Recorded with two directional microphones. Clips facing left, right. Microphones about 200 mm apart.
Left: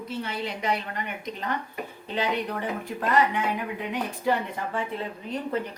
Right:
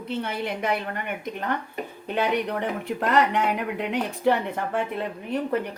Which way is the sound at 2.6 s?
65° right (ahead or behind).